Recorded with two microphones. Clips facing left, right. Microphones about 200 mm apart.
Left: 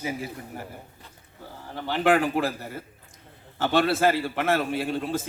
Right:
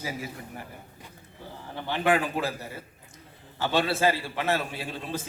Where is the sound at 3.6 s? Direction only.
50° left (ahead or behind).